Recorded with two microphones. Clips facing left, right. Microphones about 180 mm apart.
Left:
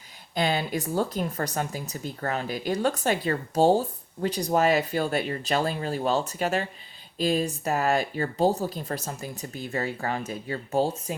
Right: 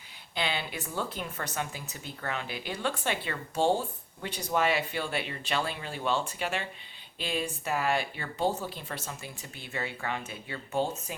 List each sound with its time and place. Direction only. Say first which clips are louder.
0.3 s speech: left 7 dB; 45° left (ahead or behind)